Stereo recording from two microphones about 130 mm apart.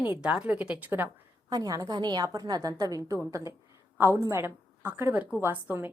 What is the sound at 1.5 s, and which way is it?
A woman's voice, 30° right (ahead or behind).